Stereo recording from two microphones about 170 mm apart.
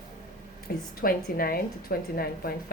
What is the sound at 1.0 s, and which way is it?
A woman's voice, 60° left (ahead or behind).